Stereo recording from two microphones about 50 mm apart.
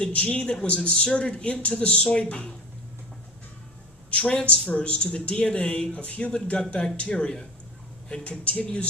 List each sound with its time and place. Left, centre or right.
0.0 s speech: left
4.1 s speech: left